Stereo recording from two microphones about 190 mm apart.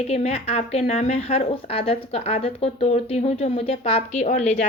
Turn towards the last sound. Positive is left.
turn(degrees=35)  # may be behind; listen again after turning